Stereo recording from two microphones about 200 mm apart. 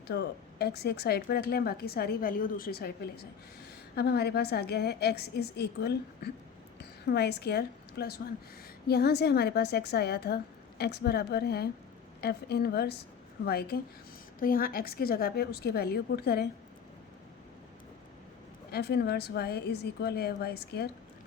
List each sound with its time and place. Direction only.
0.1 s a woman's voice: 55° left (ahead or behind)
18.7 s speech: 55° left (ahead or behind)